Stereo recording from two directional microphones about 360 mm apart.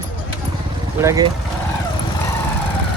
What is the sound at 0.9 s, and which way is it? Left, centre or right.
Speech, centre.